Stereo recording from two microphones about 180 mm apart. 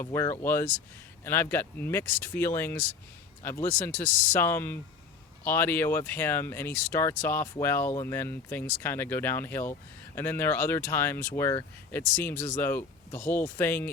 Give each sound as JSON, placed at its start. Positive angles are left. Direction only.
{"t": 0.0, "sound": "speech", "side_deg": 15}